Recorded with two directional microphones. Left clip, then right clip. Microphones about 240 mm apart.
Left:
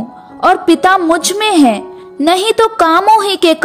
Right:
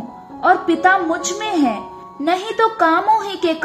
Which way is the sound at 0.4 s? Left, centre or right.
Left.